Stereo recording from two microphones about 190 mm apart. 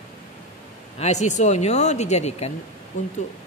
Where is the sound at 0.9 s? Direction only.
35° left (ahead or behind).